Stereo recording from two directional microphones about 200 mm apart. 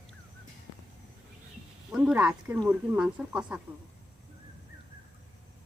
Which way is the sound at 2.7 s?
5° right (ahead or behind).